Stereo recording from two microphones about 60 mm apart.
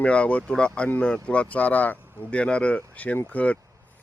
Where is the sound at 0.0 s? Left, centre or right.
Left.